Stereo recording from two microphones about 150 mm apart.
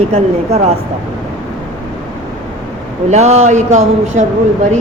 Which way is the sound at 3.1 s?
45° right (ahead or behind).